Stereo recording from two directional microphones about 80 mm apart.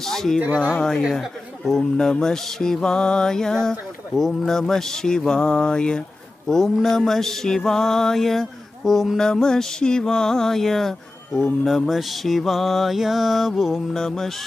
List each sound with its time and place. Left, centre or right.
0.0 s mantra: centre
0.4 s speech: centre
0.7 s speech: centre
6.5 s mantra: centre